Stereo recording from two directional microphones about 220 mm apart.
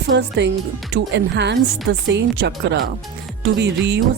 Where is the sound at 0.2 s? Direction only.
50° right (ahead or behind).